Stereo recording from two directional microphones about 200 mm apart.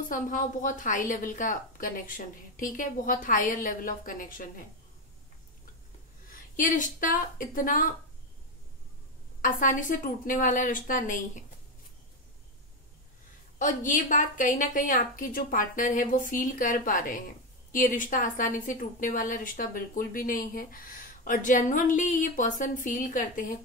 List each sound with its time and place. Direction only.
0.1 s a woman's voice: 40° left (ahead or behind)
6.5 s a woman's voice: 40° left (ahead or behind)
9.4 s a woman's voice: 40° left (ahead or behind)
13.6 s a woman's voice: 40° left (ahead or behind)